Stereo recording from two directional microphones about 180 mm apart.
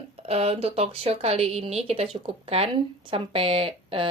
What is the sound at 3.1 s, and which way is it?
Speech, 30° right (ahead or behind).